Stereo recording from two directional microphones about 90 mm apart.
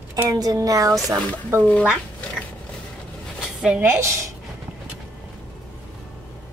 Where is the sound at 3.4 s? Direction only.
5° right (ahead or behind).